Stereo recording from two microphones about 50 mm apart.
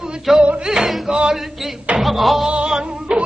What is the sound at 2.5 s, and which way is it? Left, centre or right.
Music, centre.